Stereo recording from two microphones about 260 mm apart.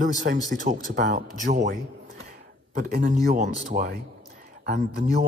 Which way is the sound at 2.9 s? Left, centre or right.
Right.